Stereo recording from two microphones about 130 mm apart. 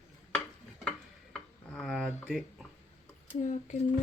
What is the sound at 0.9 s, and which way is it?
Stir, 5° left (ahead or behind).